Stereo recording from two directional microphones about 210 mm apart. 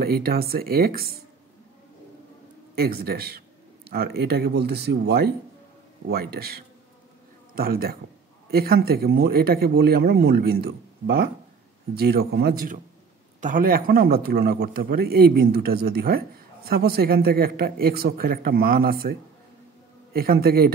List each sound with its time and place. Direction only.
0.0 s a man's voice: 45° right (ahead or behind)
2.7 s a man's voice: 45° right (ahead or behind)